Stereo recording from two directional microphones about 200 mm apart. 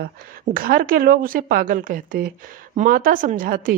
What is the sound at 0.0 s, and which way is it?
A woman's voice, 45° right (ahead or behind).